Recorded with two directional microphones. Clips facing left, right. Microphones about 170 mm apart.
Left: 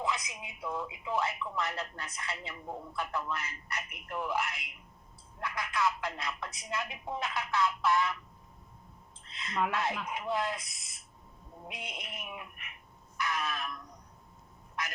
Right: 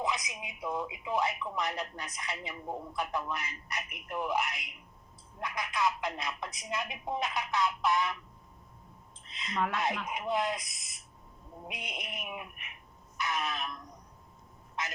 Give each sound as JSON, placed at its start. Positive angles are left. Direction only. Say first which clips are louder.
{"t": 0.0, "sound": "speech", "louder": "right 1 dB", "side_deg": -20}
{"t": 9.2, "sound": "a sound", "louder": "right 2 dB", "side_deg": -20}
{"t": 10.1, "sound": "speech", "louder": "right 2 dB", "side_deg": -20}
{"t": 14.8, "sound": "speech", "louder": "right 1 dB", "side_deg": -20}